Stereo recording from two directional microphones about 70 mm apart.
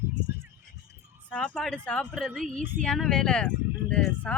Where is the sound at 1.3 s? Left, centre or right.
Centre.